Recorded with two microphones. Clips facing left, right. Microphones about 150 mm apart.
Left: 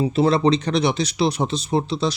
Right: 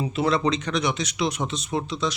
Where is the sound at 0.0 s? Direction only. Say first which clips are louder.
Left 5 dB; 30° left (ahead or behind).